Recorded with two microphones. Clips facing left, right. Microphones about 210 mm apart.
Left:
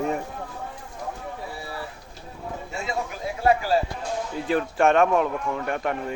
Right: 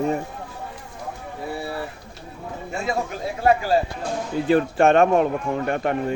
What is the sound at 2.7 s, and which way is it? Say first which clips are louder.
Speech: right 6 dB; 55° right (ahead or behind).